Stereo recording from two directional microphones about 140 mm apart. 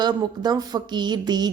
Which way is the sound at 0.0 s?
30° right (ahead or behind).